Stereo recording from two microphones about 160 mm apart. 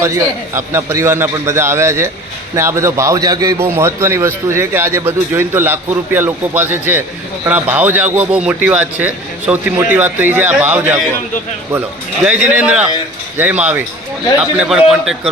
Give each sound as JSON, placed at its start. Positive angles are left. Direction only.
{"t": 0.0, "sound": "a man's voice", "side_deg": -15}
{"t": 12.2, "sound": "a man's voice", "side_deg": -10}